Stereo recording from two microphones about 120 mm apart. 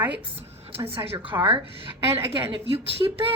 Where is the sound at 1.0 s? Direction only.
50° right (ahead or behind).